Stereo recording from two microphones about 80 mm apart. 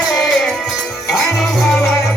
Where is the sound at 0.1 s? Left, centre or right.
Left.